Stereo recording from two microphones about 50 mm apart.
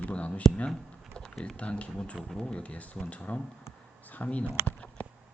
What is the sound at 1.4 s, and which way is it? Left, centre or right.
Speech, left.